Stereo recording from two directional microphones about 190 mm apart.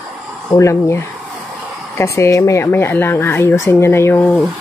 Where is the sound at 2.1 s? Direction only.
15° left (ahead or behind).